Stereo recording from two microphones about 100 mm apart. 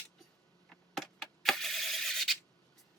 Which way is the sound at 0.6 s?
5° left (ahead or behind).